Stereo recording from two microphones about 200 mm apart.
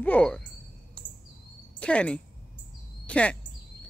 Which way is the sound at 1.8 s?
5° left (ahead or behind).